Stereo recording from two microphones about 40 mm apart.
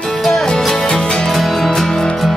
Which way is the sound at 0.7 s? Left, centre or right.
Centre.